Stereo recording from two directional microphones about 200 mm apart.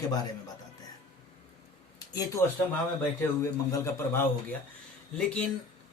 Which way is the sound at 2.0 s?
20° left (ahead or behind).